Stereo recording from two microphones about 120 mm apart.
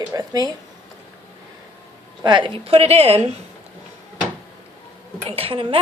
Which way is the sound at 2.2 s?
40° right (ahead or behind).